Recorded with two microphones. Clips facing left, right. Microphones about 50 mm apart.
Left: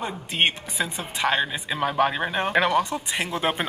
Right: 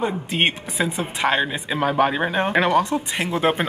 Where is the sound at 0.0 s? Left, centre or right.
Centre.